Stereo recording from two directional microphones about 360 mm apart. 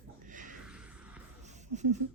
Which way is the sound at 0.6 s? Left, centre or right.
Centre.